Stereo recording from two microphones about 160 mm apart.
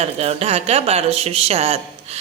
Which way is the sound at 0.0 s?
40° right (ahead or behind).